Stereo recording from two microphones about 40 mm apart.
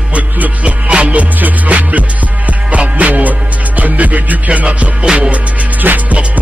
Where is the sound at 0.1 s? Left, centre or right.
Right.